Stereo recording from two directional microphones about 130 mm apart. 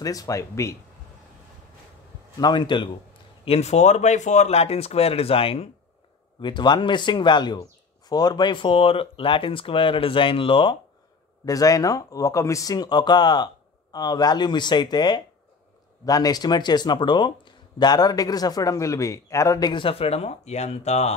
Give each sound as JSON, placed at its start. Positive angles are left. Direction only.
{"t": 0.0, "sound": "speech", "side_deg": 25}
{"t": 2.3, "sound": "speech", "side_deg": 35}
{"t": 3.4, "sound": "speech", "side_deg": 55}
{"t": 6.4, "sound": "speech", "side_deg": 35}
{"t": 11.4, "sound": "speech", "side_deg": 25}